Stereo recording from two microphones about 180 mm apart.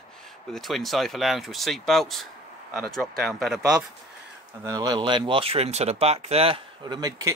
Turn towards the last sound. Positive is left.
turn(degrees=-20)  # may be behind; listen again after turning